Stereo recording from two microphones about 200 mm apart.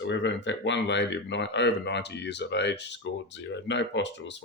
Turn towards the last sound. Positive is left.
turn(degrees=65)  # may be behind; listen again after turning